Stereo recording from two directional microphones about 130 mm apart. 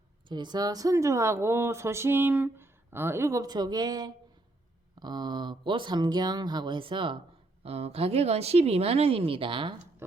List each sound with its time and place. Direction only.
0.3 s a woman's voice: 35° right (ahead or behind)
7.6 s speech: 50° right (ahead or behind)